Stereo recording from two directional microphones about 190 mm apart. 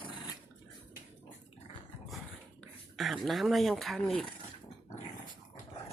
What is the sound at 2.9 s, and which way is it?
Speech, centre (ahead or behind).